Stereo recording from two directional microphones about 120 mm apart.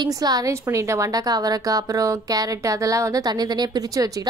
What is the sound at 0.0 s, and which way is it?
A woman's voice, 30° right (ahead or behind).